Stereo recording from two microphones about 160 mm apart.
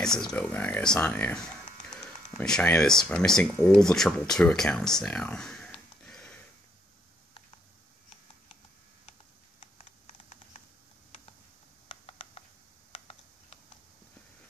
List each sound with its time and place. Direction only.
0.0 s speech: 5° left (ahead or behind)
11.9 s a sound: 35° left (ahead or behind)
12.9 s typing: 40° left (ahead or behind)